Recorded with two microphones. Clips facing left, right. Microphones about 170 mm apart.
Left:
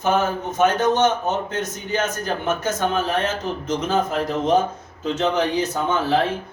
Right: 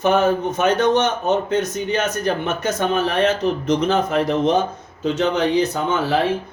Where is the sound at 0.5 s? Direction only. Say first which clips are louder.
Left 3 dB; 70° right (ahead or behind).